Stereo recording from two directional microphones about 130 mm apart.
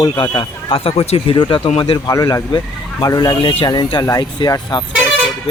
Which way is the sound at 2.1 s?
25° left (ahead or behind).